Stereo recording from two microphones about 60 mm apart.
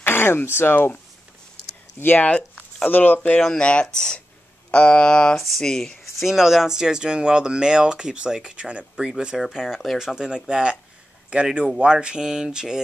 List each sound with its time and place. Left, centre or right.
0.0 s speech: left
2.0 s speech: left
2.2 s zipper: centre
2.9 s a sound: left
3.4 s speech: centre
4.6 s a sound: left
5.4 s speech: centre
6.2 s speech: centre
8.9 s speech: centre